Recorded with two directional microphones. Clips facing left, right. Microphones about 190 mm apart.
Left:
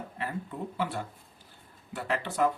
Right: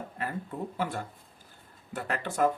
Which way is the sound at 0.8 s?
45° right (ahead or behind).